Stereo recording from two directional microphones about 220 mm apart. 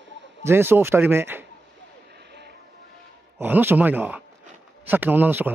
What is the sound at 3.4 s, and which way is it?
Speech, 10° right (ahead or behind).